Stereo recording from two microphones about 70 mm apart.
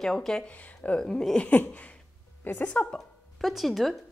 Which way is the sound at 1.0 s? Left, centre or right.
Centre.